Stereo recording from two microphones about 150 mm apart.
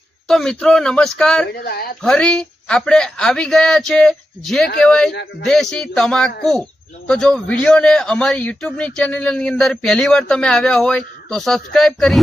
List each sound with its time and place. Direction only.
0.3 s a man's voice: 5° left (ahead or behind)
1.5 s speech: 90° left
2.0 s a man's voice: 5° left (ahead or behind)